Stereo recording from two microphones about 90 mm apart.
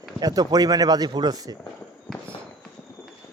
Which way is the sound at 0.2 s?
45° right (ahead or behind).